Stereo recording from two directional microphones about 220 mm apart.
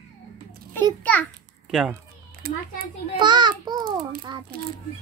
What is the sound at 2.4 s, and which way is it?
Speech, 40° right (ahead or behind).